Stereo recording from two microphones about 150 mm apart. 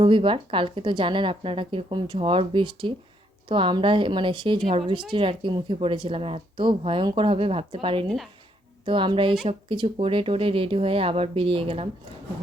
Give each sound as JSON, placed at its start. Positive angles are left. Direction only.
{"t": 0.0, "sound": "speech", "side_deg": -35}
{"t": 8.0, "sound": "speech", "side_deg": 0}
{"t": 8.8, "sound": "speech", "side_deg": -35}